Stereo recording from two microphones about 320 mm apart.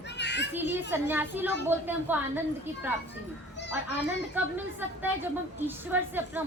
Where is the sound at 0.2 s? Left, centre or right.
Left.